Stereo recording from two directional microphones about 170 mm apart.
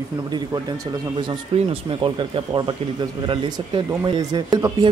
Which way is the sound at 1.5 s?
30° right (ahead or behind).